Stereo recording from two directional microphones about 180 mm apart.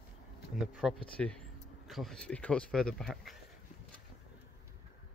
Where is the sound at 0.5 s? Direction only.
5° right (ahead or behind).